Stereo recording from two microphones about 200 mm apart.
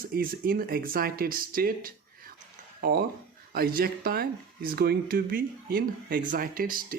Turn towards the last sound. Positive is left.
turn(degrees=-45)  # may be behind; listen again after turning